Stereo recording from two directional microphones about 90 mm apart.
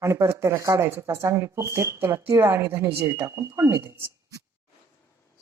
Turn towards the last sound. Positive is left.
turn(degrees=-30)  # may be behind; listen again after turning